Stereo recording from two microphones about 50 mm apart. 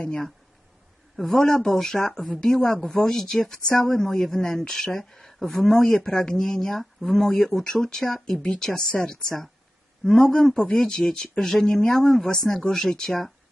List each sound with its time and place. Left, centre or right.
1.1 s speech: centre
10.2 s a man's voice: centre
10.8 s speech: centre